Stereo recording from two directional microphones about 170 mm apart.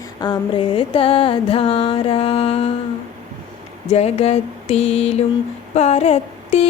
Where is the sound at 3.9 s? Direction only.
40° left (ahead or behind).